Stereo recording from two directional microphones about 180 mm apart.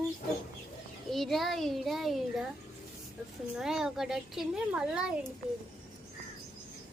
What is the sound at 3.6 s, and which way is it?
A woman's voice, 5° right (ahead or behind).